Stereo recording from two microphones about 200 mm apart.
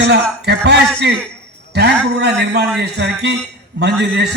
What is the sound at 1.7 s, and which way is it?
A man's voice, 55° right (ahead or behind).